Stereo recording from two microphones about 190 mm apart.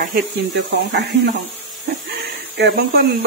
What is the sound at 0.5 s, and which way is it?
Speech, 60° right (ahead or behind).